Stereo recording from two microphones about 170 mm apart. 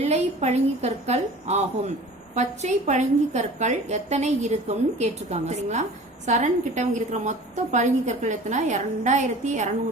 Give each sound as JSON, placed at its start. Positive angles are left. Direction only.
{"t": 0.0, "sound": "a woman's voice", "side_deg": -40}